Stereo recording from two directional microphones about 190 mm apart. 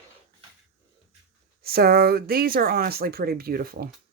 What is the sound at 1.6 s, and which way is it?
Speech, 55° right (ahead or behind).